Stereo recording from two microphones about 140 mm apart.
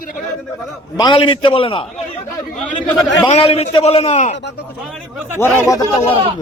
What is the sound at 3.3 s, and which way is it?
A man's voice, 45° left (ahead or behind).